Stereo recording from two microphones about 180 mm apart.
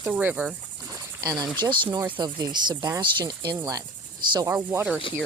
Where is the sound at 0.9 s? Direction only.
20° right (ahead or behind).